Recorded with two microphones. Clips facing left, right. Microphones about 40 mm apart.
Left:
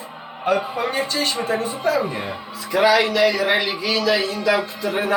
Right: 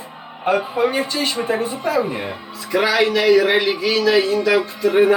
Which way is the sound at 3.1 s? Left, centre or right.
Centre.